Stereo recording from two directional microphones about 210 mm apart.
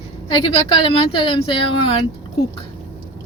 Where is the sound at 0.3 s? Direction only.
20° left (ahead or behind).